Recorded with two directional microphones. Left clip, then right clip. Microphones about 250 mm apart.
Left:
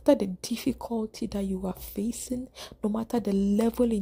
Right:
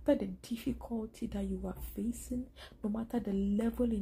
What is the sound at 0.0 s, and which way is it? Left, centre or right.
Speech, left.